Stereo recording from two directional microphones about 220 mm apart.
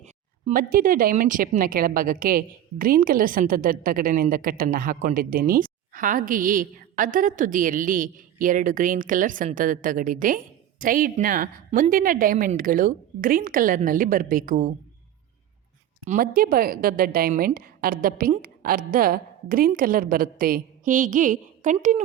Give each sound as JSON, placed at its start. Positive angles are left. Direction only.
{"t": 0.0, "sound": "speech", "side_deg": -35}
{"t": 16.0, "sound": "speech", "side_deg": -40}